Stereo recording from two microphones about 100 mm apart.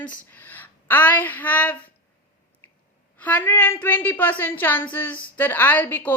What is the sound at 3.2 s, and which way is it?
Speech, 20° left (ahead or behind).